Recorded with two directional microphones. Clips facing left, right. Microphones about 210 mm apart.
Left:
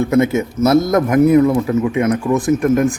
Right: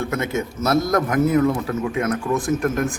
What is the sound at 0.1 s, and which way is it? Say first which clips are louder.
A man's voice: left 9 dB; 20° left (ahead or behind).